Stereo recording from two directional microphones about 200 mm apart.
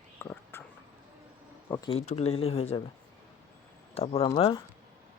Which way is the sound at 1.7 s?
20° left (ahead or behind).